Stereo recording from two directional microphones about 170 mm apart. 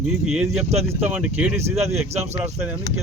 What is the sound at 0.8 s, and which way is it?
Speech, 15° right (ahead or behind).